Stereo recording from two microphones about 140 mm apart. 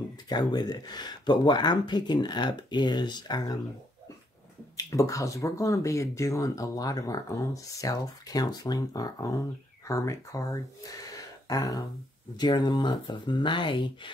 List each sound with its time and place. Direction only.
0.3 s speech: 30° left (ahead or behind)
4.7 s speech: 25° left (ahead or behind)